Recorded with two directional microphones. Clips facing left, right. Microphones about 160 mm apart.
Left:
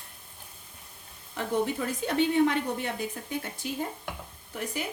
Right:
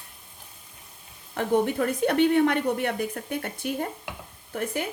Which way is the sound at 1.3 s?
60° right (ahead or behind).